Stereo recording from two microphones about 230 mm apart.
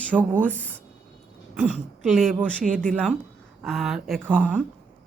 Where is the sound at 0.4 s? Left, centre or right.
Centre.